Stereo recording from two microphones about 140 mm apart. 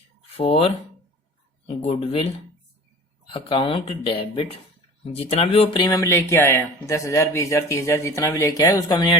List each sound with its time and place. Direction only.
0.3 s speech: 45° left (ahead or behind)
1.6 s a sound: 45° left (ahead or behind)
3.2 s speech: 40° left (ahead or behind)
5.9 s speech: 25° left (ahead or behind)